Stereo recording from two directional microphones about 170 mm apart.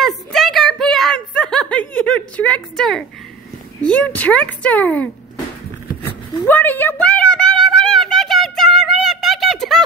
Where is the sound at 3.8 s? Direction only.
5° left (ahead or behind).